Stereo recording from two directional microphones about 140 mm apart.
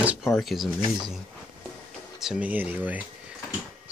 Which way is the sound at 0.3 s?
Centre (ahead or behind).